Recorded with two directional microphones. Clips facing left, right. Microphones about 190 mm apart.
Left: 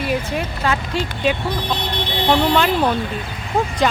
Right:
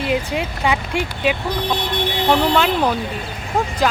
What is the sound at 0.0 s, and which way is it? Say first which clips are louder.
Speech: right 1 dB; 20° right (ahead or behind).